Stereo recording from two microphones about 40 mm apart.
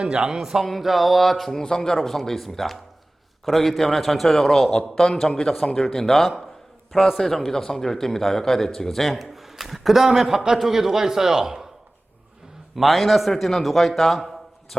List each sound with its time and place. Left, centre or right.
0.0 s speech: right
0.3 s speech: centre
12.7 s a man's voice: centre